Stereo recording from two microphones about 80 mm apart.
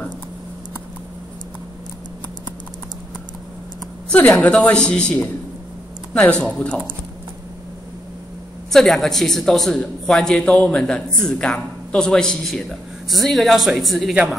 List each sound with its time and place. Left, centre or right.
4.1 s a man's voice: centre
8.7 s a man's voice: centre